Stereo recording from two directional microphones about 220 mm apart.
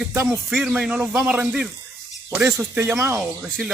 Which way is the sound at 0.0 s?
10° right (ahead or behind).